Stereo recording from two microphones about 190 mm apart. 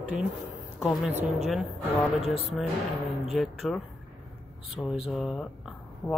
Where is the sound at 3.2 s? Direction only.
Centre (ahead or behind).